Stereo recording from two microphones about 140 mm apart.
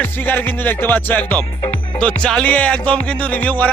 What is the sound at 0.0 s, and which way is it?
Speech, 15° left (ahead or behind).